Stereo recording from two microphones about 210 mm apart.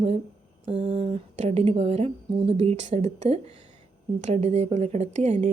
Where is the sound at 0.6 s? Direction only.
25° right (ahead or behind).